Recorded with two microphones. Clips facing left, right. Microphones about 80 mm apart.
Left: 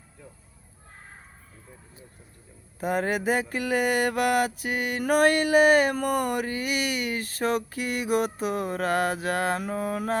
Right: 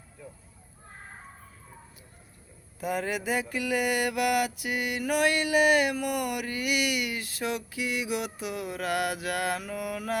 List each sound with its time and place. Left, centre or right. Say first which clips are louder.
2.8 s mantra: left 5 dB; left